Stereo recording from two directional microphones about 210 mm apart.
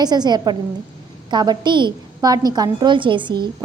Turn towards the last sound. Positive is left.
turn(degrees=-20)  # may be behind; listen again after turning